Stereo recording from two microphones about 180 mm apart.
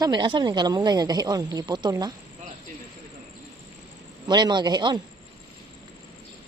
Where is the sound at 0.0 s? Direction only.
25° right (ahead or behind).